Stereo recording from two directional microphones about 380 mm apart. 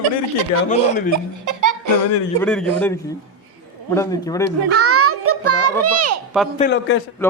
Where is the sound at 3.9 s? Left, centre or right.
Centre.